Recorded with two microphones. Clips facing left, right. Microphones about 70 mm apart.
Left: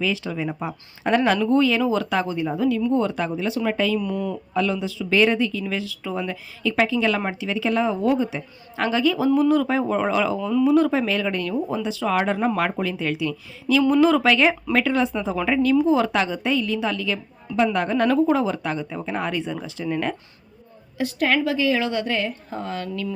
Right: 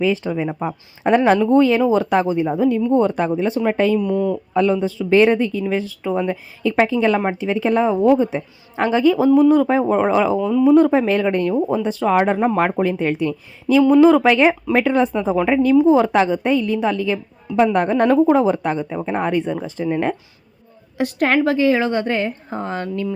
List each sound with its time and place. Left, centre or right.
0.0 s speech: right
4.5 s speech: right
13.8 s speech: centre
21.0 s speech: right